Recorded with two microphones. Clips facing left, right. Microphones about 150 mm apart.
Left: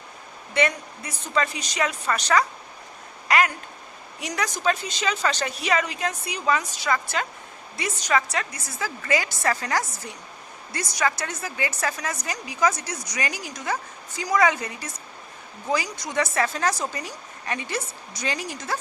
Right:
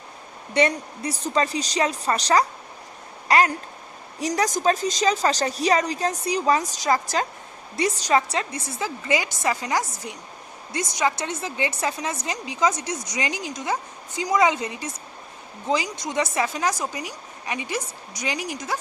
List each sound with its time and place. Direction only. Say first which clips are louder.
0.5 s a woman's voice: right 3 dB; 35° right (ahead or behind); by 18.8 s 15° right (ahead or behind)